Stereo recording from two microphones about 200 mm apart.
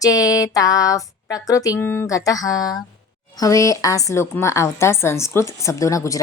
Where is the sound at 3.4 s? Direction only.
15° left (ahead or behind).